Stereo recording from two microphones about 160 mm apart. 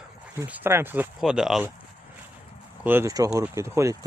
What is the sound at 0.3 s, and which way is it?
Speech, 10° right (ahead or behind).